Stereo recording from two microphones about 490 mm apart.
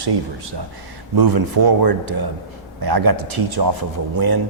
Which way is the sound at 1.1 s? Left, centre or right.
Right.